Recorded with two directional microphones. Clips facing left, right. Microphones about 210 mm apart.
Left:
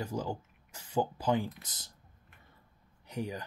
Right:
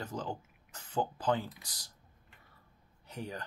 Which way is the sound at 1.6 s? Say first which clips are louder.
Left 1 dB; 25° left (ahead or behind).